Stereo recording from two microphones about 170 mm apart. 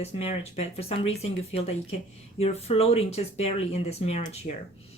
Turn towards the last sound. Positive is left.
turn(degrees=40)  # may be behind; listen again after turning